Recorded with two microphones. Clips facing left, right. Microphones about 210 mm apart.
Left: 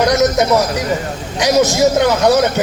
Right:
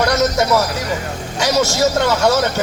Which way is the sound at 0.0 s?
15° left (ahead or behind).